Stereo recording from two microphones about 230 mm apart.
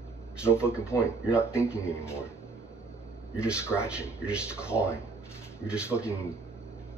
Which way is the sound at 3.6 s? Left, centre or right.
Centre.